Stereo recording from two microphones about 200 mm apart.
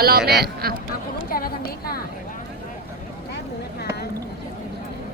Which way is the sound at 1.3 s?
45° left (ahead or behind).